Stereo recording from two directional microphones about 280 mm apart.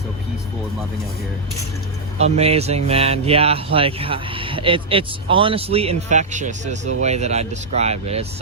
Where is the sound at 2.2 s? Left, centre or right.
Right.